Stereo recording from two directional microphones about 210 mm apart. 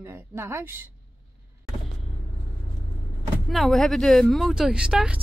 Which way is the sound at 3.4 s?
Centre (ahead or behind).